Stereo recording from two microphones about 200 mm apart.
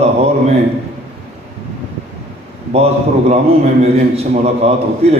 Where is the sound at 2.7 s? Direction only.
30° right (ahead or behind).